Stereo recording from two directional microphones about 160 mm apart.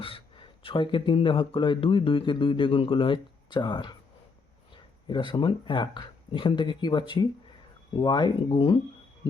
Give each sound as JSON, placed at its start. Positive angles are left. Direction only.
{"t": 0.0, "sound": "speech", "side_deg": 35}
{"t": 5.0, "sound": "speech", "side_deg": 30}